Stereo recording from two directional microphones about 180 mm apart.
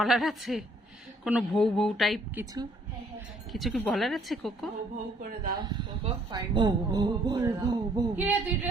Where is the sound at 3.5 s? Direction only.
Centre (ahead or behind).